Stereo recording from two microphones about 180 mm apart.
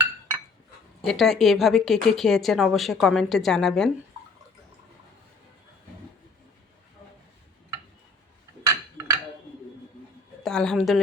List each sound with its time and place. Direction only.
1.0 s speech: centre (ahead or behind)
8.6 s a sound: 15° right (ahead or behind)
10.4 s a woman's voice: 5° left (ahead or behind)